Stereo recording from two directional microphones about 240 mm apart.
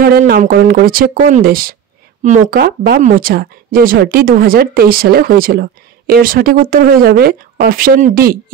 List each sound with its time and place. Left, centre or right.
0.0 s speech: right